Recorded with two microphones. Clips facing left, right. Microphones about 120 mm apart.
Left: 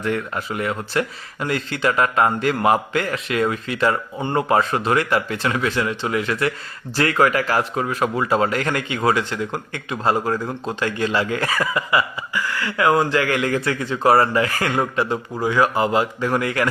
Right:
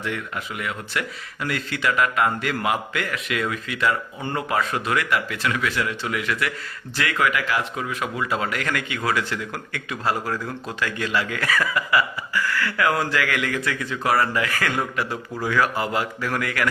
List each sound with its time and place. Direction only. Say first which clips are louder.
0.0 s speech: left 6 dB; 40° left (ahead or behind)